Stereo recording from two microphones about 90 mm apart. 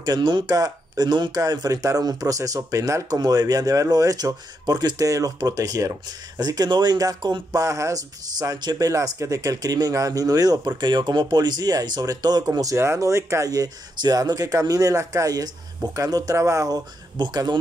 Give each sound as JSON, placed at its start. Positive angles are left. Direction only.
{"t": 0.0, "sound": "speech", "side_deg": -55}
{"t": 1.4, "sound": "speech", "side_deg": -40}
{"t": 7.6, "sound": "speech", "side_deg": -35}
{"t": 17.2, "sound": "speech", "side_deg": -55}